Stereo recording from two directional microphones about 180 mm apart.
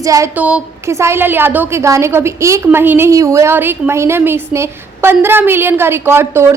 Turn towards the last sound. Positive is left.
turn(degrees=-15)  # may be behind; listen again after turning